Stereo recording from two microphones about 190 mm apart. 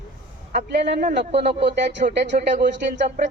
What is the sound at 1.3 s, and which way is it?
Speech, 65° right (ahead or behind).